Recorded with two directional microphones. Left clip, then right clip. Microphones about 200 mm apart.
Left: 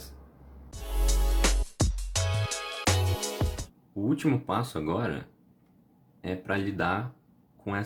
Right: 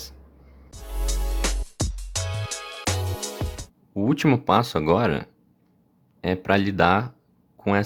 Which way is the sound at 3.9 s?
50° right (ahead or behind).